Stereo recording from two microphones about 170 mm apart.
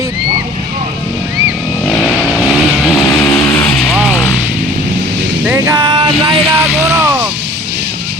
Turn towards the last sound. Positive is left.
turn(degrees=-15)  # may be behind; listen again after turning